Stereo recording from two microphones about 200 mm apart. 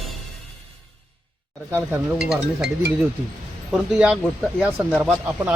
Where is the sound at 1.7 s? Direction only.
10° right (ahead or behind).